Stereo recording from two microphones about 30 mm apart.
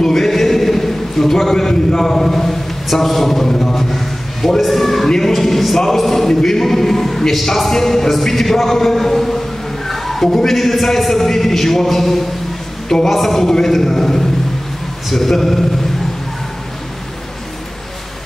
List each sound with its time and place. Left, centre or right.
0.1 s a sound: centre
2.9 s music: centre
3.9 s a sound: centre
5.3 s a man's voice: centre
6.2 s music: centre
9.8 s a sound: centre
10.4 s music: centre
12.8 s a woman's voice: centre
13.1 s a man's voice: centre
13.4 s music: centre